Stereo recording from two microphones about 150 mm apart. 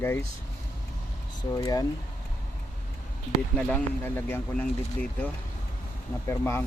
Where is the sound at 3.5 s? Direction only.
10° left (ahead or behind).